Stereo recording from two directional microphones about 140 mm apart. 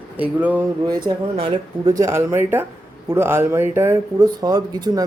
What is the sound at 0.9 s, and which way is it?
Speech, 35° right (ahead or behind).